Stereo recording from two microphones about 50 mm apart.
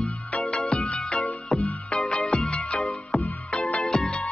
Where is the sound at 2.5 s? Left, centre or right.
Left.